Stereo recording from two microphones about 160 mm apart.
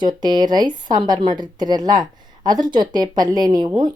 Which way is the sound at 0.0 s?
25° right (ahead or behind).